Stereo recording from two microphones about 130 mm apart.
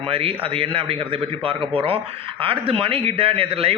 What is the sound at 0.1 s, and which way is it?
A man's voice, 45° right (ahead or behind).